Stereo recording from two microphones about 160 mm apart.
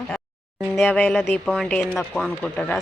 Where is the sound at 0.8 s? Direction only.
10° left (ahead or behind).